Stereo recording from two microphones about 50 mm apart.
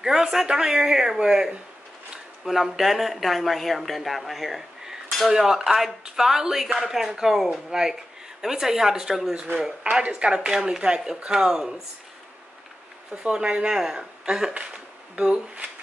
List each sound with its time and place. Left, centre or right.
0.0 s speech: centre
9.3 s speech: centre
13.1 s speech: centre
14.5 s a sound: right
15.3 s speech: right